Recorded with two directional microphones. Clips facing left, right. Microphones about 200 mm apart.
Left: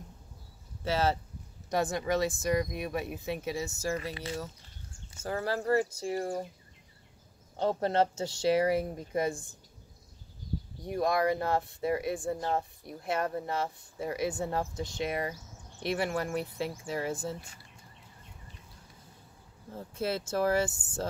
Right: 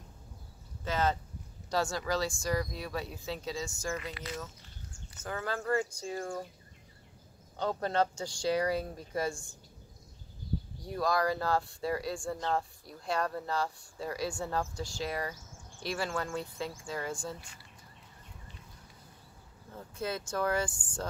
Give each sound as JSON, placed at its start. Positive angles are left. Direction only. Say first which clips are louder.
{"t": 0.8, "sound": "speech", "louder": "left 2 dB", "side_deg": 30}
{"t": 1.7, "sound": "speech", "louder": "left 2 dB", "side_deg": 20}
{"t": 7.5, "sound": "speech", "louder": "left 3 dB", "side_deg": 25}
{"t": 10.8, "sound": "speech", "louder": "left 3 dB", "side_deg": 20}
{"t": 19.7, "sound": "speech", "louder": "left 4 dB", "side_deg": 25}